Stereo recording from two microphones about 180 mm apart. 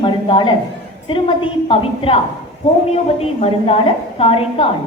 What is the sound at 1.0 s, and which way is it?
A woman's voice, 30° left (ahead or behind).